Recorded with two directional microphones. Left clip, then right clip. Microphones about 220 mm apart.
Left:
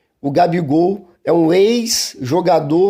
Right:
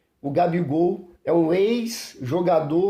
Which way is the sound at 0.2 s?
40° left (ahead or behind).